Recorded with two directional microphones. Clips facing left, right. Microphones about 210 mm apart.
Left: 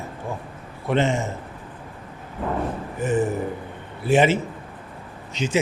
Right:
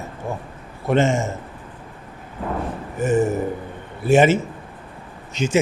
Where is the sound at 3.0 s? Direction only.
45° right (ahead or behind).